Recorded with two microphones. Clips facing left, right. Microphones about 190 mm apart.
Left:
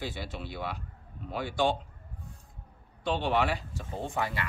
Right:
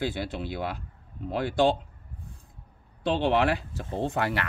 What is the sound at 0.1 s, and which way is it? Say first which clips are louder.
Speech: right 6 dB; 60° right (ahead or behind).